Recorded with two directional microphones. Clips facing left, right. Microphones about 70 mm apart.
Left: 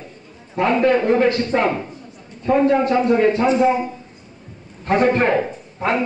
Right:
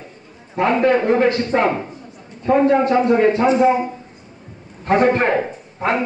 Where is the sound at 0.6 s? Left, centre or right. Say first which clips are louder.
Right 1 dB; right.